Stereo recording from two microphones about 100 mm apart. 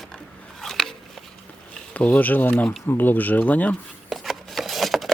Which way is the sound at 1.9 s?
15° left (ahead or behind).